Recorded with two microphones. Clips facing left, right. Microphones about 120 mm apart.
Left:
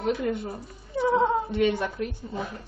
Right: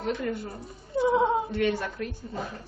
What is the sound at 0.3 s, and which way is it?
Speech, 25° left (ahead or behind).